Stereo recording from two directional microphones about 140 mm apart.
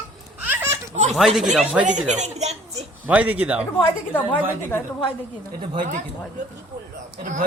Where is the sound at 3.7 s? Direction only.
10° left (ahead or behind).